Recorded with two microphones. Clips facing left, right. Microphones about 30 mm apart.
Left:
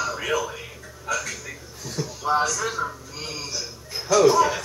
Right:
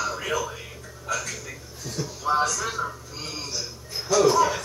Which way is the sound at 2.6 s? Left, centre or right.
Centre.